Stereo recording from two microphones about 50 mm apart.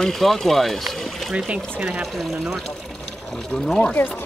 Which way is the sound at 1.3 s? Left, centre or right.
Right.